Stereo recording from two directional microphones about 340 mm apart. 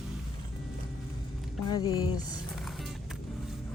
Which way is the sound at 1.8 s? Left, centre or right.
Centre.